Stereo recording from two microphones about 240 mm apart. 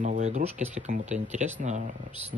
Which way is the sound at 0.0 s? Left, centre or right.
Right.